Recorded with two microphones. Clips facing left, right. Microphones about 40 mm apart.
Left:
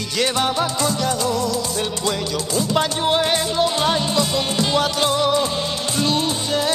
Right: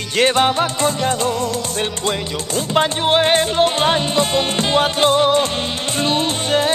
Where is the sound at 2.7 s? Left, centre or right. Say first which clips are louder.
Right 4 dB; right.